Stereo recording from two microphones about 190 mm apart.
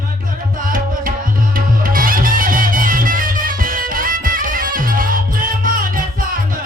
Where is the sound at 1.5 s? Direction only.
45° right (ahead or behind).